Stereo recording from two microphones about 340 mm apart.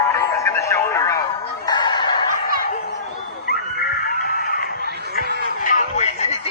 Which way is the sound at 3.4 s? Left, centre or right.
Left.